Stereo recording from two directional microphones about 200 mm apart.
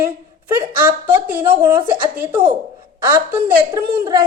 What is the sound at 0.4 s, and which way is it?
Speech, 10° right (ahead or behind).